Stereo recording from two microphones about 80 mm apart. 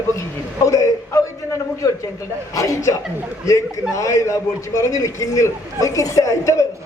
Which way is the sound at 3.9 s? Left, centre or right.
Left.